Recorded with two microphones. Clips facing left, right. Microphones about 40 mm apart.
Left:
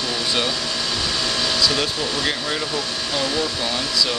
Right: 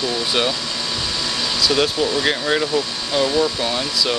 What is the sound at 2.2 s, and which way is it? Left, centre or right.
Speech, centre.